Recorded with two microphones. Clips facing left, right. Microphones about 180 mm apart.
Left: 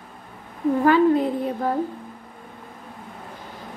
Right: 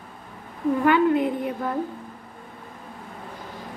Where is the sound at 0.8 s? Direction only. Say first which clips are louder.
Left 2 dB; 30° left (ahead or behind).